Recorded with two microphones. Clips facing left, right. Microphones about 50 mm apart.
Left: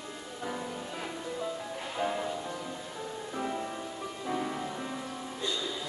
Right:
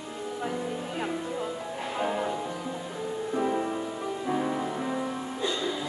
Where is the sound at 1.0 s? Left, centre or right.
Right.